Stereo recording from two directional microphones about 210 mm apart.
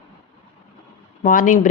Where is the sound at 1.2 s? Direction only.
40° left (ahead or behind).